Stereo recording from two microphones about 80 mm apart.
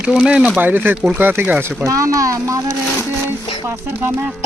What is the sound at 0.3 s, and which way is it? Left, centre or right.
Speech, centre.